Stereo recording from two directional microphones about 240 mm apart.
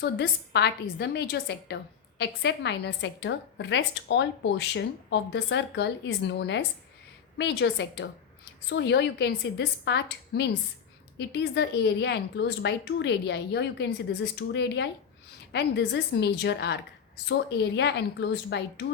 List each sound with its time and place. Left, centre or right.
0.0 s a woman's voice: left